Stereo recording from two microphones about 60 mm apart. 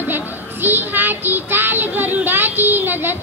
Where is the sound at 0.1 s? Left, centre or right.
Right.